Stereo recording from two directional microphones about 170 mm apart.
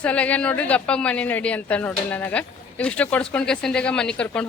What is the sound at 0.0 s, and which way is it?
Speech, 5° left (ahead or behind).